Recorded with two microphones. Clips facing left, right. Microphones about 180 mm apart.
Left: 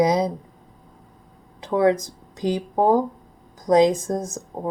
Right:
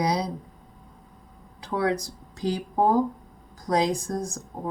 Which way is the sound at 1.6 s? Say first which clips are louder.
Left 7 dB; 20° left (ahead or behind).